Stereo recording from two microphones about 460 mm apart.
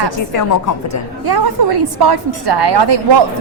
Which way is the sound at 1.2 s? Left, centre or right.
Right.